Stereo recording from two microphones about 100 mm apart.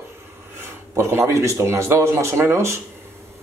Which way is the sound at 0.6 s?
25° right (ahead or behind).